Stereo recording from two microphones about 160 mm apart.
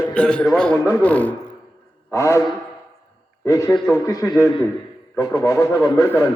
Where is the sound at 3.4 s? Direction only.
20° left (ahead or behind).